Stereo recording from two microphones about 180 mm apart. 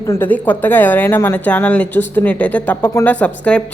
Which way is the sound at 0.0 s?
15° left (ahead or behind).